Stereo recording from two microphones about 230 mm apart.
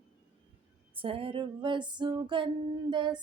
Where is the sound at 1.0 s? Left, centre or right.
Right.